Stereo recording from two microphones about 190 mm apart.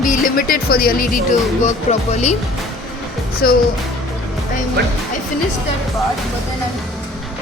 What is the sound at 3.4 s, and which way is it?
Music, 50° left (ahead or behind).